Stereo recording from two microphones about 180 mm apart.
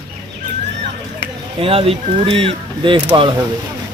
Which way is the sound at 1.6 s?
30° right (ahead or behind).